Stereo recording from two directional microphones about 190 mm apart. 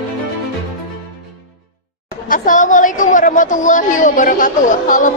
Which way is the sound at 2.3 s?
45° left (ahead or behind).